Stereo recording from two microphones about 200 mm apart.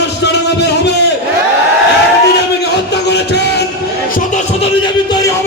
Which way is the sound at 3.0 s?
60° left (ahead or behind).